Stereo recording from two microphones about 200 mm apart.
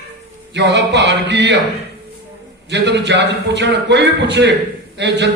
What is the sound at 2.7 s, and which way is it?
A man's voice, 60° right (ahead or behind).